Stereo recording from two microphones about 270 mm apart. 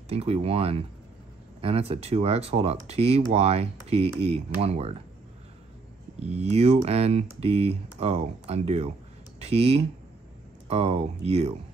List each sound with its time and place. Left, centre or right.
0.1 s speech: right
6.1 s speech: right